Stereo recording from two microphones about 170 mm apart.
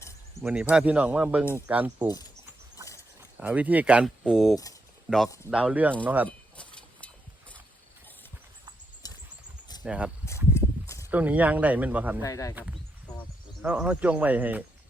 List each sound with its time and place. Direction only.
0.4 s speech: 5° right (ahead or behind)
3.3 s speech: 10° right (ahead or behind)
6.2 s a sound: 10° left (ahead or behind)
9.0 s horse: 20° left (ahead or behind)
9.8 s speech: 5° right (ahead or behind)
10.2 s horse: 15° left (ahead or behind)
11.1 s speech: 10° right (ahead or behind)
12.2 s speech: 20° left (ahead or behind)
13.6 s speech: 5° right (ahead or behind)